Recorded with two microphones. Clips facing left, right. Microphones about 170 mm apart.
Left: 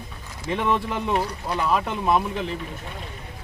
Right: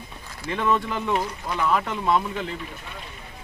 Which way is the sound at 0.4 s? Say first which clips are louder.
Even; 20° left (ahead or behind).